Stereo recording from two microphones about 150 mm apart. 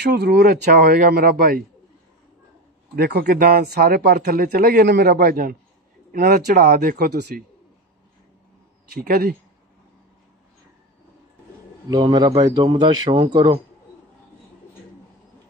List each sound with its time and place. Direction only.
0.0 s speech: 90° right
3.0 s speech: 90° right
8.9 s speech: 75° right (ahead or behind)
11.9 s a man's voice: 30° right (ahead or behind)